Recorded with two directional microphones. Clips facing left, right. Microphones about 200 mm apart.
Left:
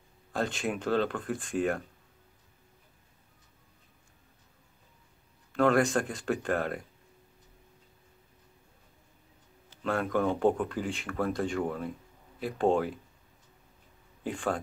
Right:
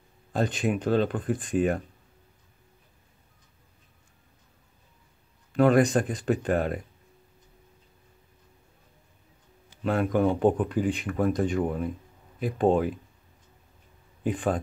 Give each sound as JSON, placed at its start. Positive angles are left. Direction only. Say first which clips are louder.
{"t": 0.3, "sound": "speech", "louder": "right 5 dB", "side_deg": -20}
{"t": 5.5, "sound": "speech", "louder": "right 4 dB", "side_deg": -20}
{"t": 9.7, "sound": "speech", "louder": "right 4 dB", "side_deg": -20}
{"t": 14.2, "sound": "speech", "louder": "right 5 dB", "side_deg": -20}